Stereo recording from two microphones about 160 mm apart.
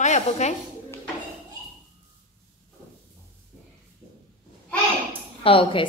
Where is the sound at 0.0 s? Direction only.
45° left (ahead or behind).